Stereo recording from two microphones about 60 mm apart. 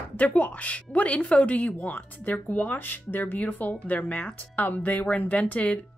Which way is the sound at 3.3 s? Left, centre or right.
Left.